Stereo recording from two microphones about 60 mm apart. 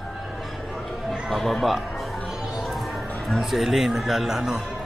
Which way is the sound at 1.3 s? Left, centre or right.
Centre.